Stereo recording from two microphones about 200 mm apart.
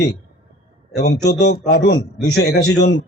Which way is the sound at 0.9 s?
55° left (ahead or behind).